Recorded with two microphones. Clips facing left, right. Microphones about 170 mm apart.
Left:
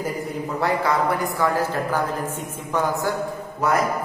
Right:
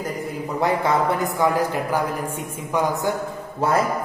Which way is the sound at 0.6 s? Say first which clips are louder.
Right 2 dB; 20° right (ahead or behind).